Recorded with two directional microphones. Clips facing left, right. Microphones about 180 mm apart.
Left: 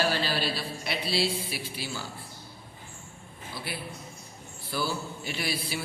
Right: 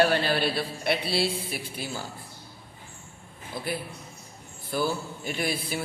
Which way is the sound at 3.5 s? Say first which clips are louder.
Right 5 dB; 45° right (ahead or behind).